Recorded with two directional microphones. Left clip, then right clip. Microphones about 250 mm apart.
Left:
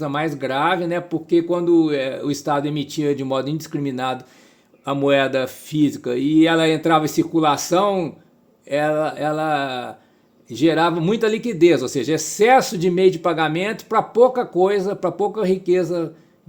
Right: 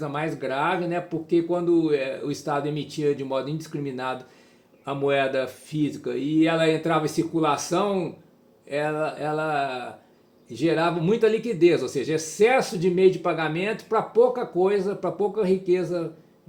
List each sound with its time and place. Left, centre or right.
0.0 s speech: left